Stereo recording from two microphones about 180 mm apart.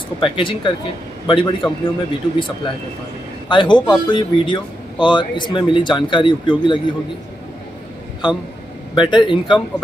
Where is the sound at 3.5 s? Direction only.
25° left (ahead or behind).